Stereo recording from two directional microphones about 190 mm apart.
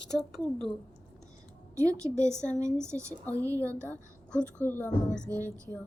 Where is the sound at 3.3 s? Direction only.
10° left (ahead or behind).